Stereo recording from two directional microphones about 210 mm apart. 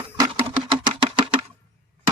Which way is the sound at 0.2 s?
25° right (ahead or behind).